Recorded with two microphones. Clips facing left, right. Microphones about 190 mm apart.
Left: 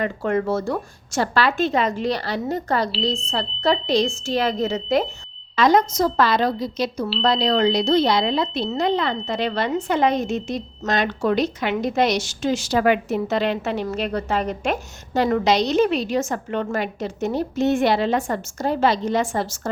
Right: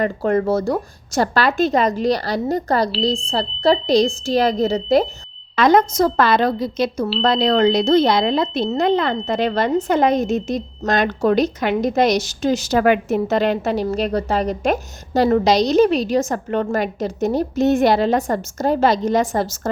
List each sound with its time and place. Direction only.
0.0 s a woman's voice: 35° right (ahead or behind)
5.5 s a woman's voice: 55° right (ahead or behind)